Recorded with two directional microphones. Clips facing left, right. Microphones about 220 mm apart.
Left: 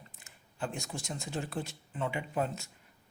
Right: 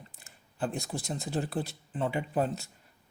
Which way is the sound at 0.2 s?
35° right (ahead or behind).